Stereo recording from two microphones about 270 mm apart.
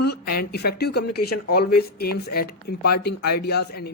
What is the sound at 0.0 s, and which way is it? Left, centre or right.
Speech, left.